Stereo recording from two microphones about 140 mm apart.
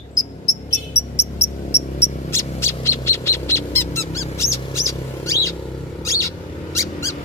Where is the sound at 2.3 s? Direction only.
20° left (ahead or behind).